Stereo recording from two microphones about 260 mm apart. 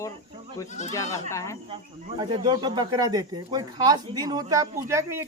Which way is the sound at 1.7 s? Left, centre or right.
Centre.